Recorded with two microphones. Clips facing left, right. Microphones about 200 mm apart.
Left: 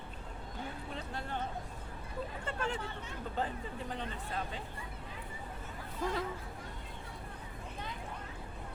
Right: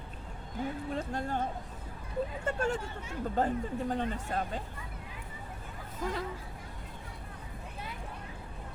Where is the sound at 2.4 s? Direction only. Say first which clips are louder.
Right 4 dB; 45° right (ahead or behind).